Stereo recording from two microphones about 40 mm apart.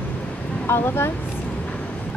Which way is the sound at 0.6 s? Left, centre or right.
Left.